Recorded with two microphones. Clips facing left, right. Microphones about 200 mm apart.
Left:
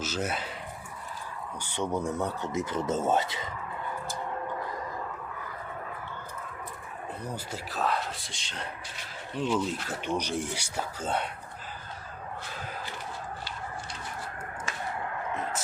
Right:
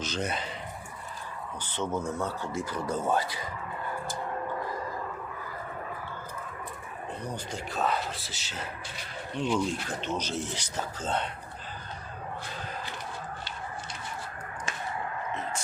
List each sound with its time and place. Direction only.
0.0 s speech: 5° left (ahead or behind)
1.6 s speech: 15° left (ahead or behind)
7.3 s speech: 5° left (ahead or behind)